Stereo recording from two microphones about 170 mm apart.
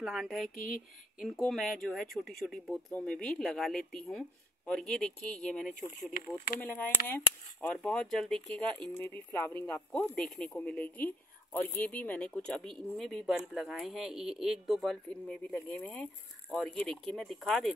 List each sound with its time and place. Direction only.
0.0 s speech: centre (ahead or behind)
6.2 s speech: 60° left (ahead or behind)
6.6 s speech: 10° left (ahead or behind)